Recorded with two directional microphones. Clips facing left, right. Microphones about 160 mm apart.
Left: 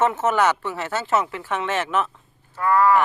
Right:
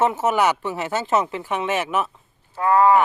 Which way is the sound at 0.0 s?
15° right (ahead or behind).